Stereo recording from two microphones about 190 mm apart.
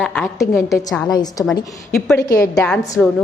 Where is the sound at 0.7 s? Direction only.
20° left (ahead or behind).